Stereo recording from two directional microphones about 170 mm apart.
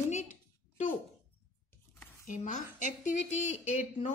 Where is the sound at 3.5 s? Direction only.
45° left (ahead or behind).